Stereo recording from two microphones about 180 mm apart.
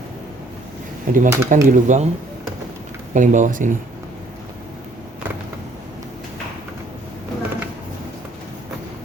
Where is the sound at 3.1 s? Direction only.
45° right (ahead or behind).